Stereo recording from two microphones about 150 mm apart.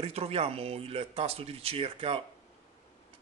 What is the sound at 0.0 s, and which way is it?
Speech, 40° right (ahead or behind).